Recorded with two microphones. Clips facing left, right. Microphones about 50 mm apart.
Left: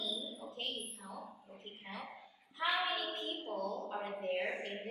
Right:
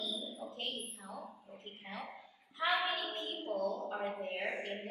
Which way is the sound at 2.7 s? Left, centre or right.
Centre.